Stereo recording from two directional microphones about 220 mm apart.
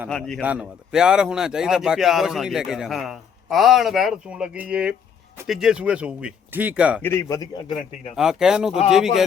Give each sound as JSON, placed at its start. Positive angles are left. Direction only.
{"t": 0.1, "sound": "speech", "side_deg": 5}
{"t": 7.2, "sound": "a man's voice", "side_deg": 15}
{"t": 8.1, "sound": "speech", "side_deg": 0}